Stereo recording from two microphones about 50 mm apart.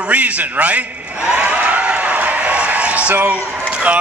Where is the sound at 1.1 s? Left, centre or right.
Right.